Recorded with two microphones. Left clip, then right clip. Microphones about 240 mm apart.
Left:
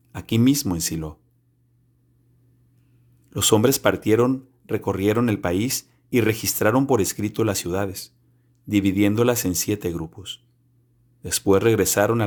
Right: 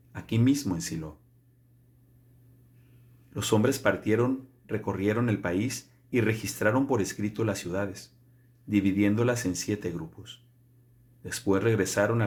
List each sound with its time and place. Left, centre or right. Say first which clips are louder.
0.1 s speech: left 6 dB; left
3.2 s speech: left 8 dB; left